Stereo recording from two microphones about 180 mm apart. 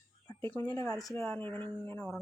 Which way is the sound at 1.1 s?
10° left (ahead or behind).